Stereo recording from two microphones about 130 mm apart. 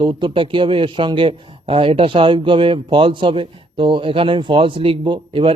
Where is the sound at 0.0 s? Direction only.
40° right (ahead or behind).